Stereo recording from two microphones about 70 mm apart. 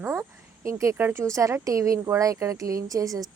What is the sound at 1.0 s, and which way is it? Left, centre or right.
Speech, right.